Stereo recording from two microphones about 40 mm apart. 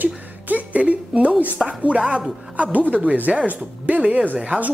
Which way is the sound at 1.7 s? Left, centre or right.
Right.